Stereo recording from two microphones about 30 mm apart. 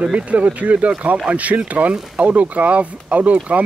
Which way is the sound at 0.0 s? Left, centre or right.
Right.